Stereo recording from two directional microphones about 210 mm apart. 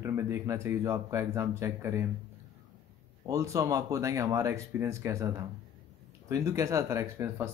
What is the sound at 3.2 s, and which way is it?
Speech, 15° right (ahead or behind).